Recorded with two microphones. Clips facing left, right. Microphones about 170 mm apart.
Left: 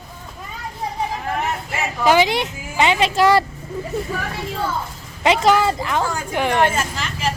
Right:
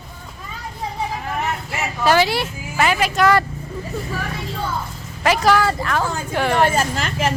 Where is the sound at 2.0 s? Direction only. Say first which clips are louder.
Left 1 dB; 15° left (ahead or behind).